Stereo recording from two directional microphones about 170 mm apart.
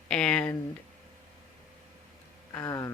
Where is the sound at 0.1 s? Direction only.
5° left (ahead or behind).